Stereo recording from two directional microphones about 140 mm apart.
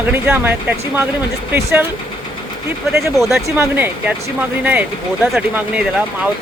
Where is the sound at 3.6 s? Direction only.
15° right (ahead or behind).